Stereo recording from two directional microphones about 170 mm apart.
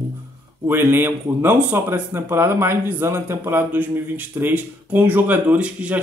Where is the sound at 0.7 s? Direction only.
10° right (ahead or behind).